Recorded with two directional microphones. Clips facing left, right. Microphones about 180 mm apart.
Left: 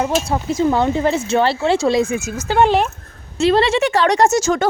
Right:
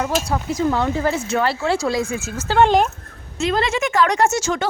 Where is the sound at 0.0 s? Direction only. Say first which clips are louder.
Left 3 dB; 25° left (ahead or behind); by 2.9 s 5° left (ahead or behind).